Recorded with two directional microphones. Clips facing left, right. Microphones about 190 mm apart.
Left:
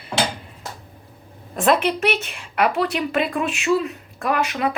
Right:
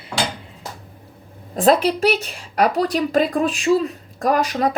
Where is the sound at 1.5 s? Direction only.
35° right (ahead or behind).